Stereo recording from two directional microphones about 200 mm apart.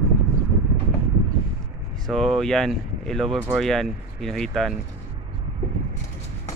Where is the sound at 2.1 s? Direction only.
Centre (ahead or behind).